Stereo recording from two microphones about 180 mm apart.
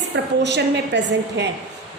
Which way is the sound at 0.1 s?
75° right (ahead or behind).